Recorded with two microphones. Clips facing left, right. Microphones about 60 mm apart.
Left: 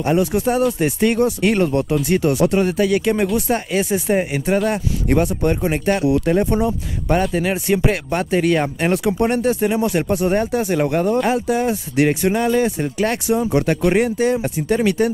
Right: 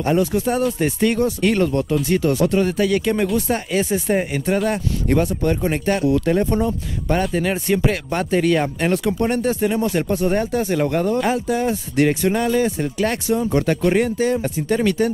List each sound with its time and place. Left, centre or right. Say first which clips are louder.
0.0 s speech: left 1 dB; centre